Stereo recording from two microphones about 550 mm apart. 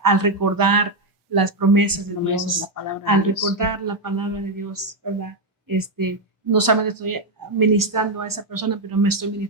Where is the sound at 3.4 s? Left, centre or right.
Right.